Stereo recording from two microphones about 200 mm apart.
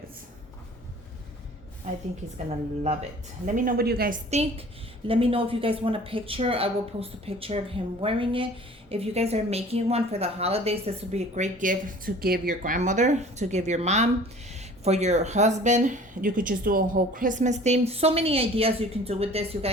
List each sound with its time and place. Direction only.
1.9 s a woman's voice: 35° right (ahead or behind)
4.3 s a woman's voice: 30° right (ahead or behind)